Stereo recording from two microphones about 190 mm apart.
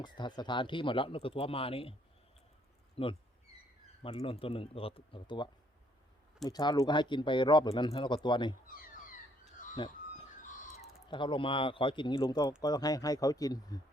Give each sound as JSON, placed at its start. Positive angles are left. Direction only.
{"t": 0.0, "sound": "speech", "side_deg": 25}
{"t": 3.0, "sound": "speech", "side_deg": 30}
{"t": 8.6, "sound": "speech", "side_deg": 50}
{"t": 9.7, "sound": "a sound", "side_deg": 25}
{"t": 11.1, "sound": "speech", "side_deg": 25}